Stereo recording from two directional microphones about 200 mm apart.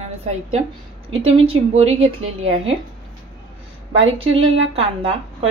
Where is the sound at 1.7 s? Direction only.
30° right (ahead or behind).